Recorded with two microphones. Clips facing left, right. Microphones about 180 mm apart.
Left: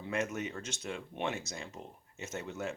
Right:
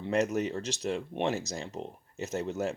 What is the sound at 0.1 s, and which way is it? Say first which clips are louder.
Speech: right 7 dB; 40° right (ahead or behind).